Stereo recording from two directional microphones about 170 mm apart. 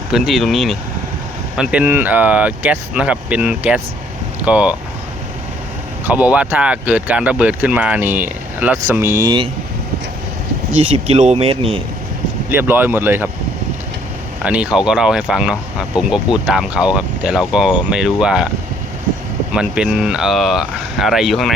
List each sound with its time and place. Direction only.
0.1 s speech: centre (ahead or behind)
6.1 s speech: 10° right (ahead or behind)
10.8 s speech: 35° right (ahead or behind)
12.5 s speech: 15° right (ahead or behind)
14.4 s speech: 5° right (ahead or behind)
19.5 s speech: 5° right (ahead or behind)